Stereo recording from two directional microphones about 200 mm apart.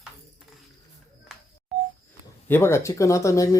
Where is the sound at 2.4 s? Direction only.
10° left (ahead or behind).